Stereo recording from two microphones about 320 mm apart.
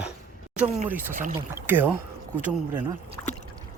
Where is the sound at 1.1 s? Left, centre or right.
Right.